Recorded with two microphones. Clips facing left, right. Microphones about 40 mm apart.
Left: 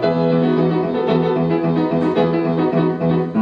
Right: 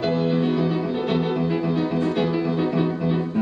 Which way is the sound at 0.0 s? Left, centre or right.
Centre.